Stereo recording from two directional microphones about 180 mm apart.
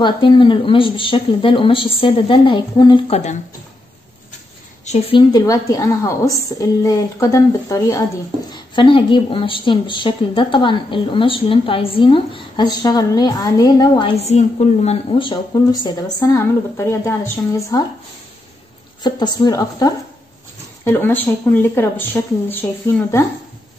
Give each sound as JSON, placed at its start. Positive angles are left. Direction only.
{"t": 0.0, "sound": "a woman's voice", "side_deg": 25}
{"t": 4.8, "sound": "a woman's voice", "side_deg": 40}
{"t": 5.3, "sound": "a woman's voice", "side_deg": 20}
{"t": 19.0, "sound": "a woman's voice", "side_deg": 25}